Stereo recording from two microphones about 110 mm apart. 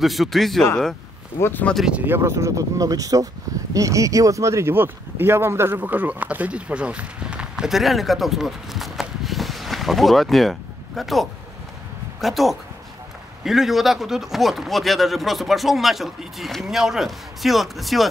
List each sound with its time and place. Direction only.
0.0 s speech: centre (ahead or behind)
1.4 s speech: 15° left (ahead or behind)
1.9 s speech: 15° right (ahead or behind); by 18.0 s centre (ahead or behind)